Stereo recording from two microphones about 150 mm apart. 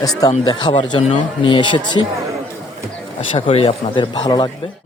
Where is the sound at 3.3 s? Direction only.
35° left (ahead or behind).